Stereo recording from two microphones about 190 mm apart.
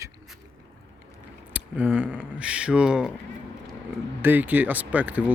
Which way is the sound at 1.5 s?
10° right (ahead or behind).